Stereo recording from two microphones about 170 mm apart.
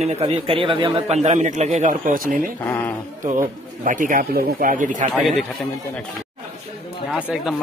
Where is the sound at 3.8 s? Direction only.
50° right (ahead or behind).